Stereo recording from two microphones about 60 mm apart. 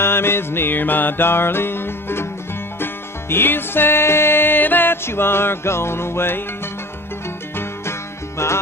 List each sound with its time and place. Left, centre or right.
0.0 s music: left
8.4 s music: left